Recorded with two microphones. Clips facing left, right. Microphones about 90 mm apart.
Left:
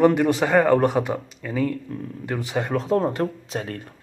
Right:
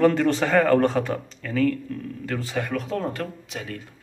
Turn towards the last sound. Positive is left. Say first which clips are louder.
# left 5 dB
turn(degrees=40)  # may be behind; listen again after turning